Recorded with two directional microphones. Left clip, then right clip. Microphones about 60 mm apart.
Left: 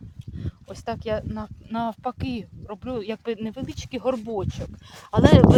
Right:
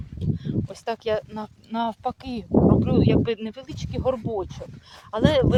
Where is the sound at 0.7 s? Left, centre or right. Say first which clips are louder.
Right 1 dB; right.